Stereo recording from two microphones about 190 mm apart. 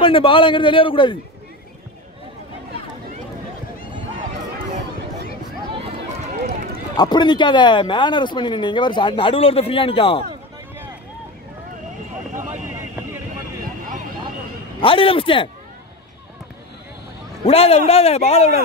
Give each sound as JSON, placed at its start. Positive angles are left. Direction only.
{"t": 0.0, "sound": "speech", "side_deg": 25}
{"t": 7.0, "sound": "speech", "side_deg": 25}
{"t": 12.4, "sound": "a sound", "side_deg": -15}
{"t": 14.8, "sound": "speech", "side_deg": 30}
{"t": 17.5, "sound": "a man's voice", "side_deg": 30}